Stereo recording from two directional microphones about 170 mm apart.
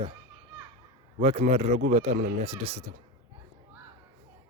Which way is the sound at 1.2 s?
40° right (ahead or behind).